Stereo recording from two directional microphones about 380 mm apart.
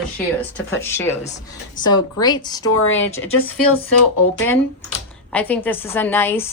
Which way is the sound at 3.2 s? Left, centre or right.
Centre.